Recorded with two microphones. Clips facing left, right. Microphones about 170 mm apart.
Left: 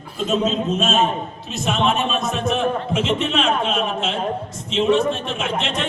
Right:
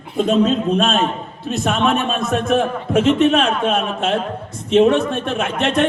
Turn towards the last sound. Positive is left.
turn(degrees=-55)  # may be behind; listen again after turning